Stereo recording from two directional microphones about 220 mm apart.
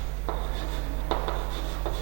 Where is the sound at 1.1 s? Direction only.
25° right (ahead or behind).